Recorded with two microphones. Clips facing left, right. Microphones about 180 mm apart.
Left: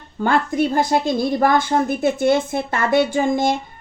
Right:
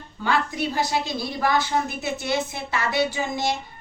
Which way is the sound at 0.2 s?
50° left (ahead or behind).